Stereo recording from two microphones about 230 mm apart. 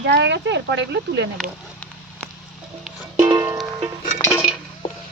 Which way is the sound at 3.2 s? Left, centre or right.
Centre.